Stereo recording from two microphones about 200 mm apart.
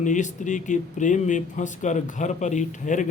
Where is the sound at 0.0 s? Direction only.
40° left (ahead or behind).